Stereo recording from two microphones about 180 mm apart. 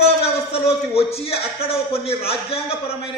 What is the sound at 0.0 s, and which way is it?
A man's voice, 35° left (ahead or behind).